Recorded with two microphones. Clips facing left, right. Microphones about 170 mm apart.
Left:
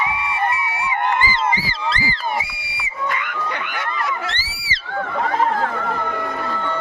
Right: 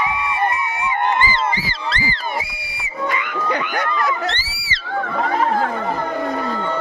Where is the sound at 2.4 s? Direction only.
40° right (ahead or behind).